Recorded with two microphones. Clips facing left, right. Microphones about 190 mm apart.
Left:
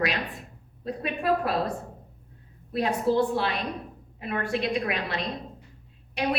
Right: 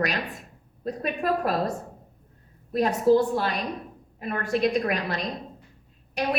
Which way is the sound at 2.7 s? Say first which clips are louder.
Right 4 dB; 45° right (ahead or behind).